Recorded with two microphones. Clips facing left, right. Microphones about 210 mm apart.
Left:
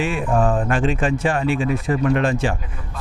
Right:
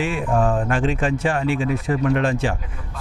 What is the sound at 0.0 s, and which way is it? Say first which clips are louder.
Speech: left 1 dB; 25° left (ahead or behind).